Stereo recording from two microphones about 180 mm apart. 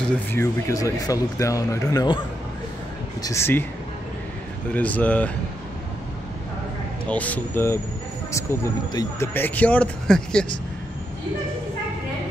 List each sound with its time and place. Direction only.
0.0 s speech: 15° left (ahead or behind)
3.2 s speech: 15° left (ahead or behind)
4.7 s speech: 10° left (ahead or behind)
7.1 s speech: 10° left (ahead or behind)
8.9 s speech: 15° left (ahead or behind)